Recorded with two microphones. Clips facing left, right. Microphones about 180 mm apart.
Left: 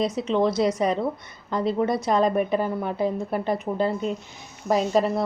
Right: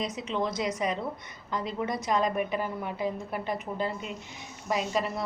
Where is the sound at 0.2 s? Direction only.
35° left (ahead or behind).